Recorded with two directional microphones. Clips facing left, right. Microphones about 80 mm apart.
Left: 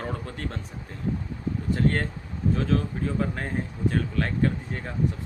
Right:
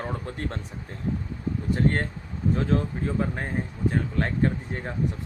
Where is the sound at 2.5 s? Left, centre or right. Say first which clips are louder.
Right 1 dB; right.